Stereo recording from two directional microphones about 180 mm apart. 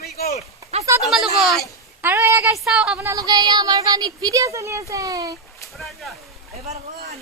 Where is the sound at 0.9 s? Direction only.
15° right (ahead or behind).